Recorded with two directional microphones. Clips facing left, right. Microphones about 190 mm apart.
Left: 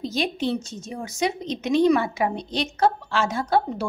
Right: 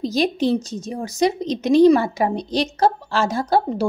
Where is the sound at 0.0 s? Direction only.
40° right (ahead or behind).